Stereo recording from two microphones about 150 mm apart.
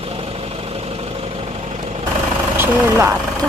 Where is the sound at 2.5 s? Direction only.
15° right (ahead or behind).